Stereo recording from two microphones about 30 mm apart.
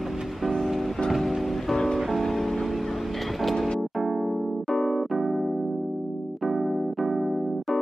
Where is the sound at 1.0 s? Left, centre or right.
Centre.